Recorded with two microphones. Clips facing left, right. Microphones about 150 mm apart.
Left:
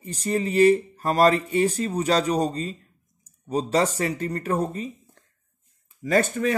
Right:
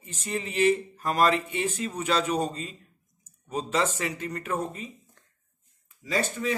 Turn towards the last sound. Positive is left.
turn(degrees=55)  # may be behind; listen again after turning